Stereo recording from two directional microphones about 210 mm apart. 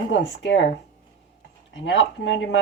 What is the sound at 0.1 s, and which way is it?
Speech, 60° left (ahead or behind).